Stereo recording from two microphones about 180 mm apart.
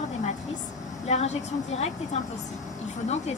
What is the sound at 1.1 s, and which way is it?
Speech, 35° left (ahead or behind).